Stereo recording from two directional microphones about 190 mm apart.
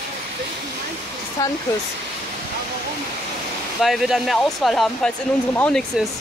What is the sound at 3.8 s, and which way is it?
Speech, centre (ahead or behind).